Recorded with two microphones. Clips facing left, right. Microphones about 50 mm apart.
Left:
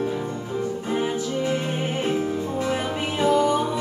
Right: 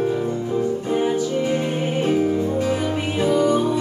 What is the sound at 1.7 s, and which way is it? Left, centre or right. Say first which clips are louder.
Music: right 4 dB; centre.